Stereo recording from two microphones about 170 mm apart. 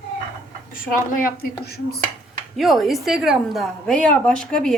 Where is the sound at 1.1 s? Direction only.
60° left (ahead or behind).